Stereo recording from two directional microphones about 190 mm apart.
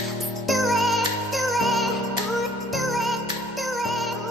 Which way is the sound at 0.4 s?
Centre (ahead or behind).